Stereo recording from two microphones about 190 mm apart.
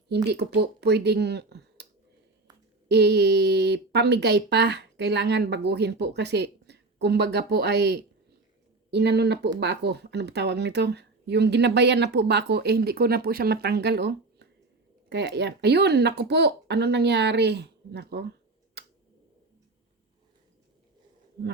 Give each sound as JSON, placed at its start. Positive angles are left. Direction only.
{"t": 0.3, "sound": "speech", "side_deg": -60}
{"t": 2.9, "sound": "speech", "side_deg": -60}